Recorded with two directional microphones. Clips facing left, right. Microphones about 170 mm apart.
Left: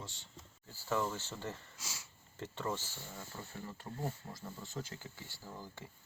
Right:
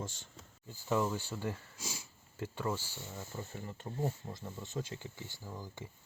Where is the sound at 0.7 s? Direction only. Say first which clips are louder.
Right 3 dB; 15° right (ahead or behind).